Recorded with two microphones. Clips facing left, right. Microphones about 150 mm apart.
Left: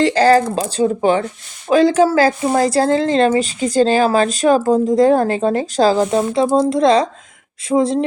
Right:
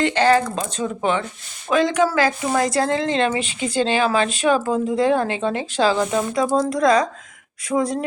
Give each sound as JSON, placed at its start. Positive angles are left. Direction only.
{"t": 0.0, "sound": "speech", "side_deg": 35}